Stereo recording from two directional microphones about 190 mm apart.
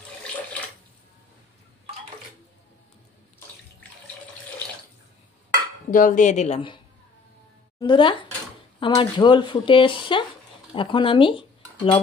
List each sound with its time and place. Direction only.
5.9 s speech: 45° left (ahead or behind); by 6.8 s 30° left (ahead or behind)
7.8 s speech: 25° left (ahead or behind)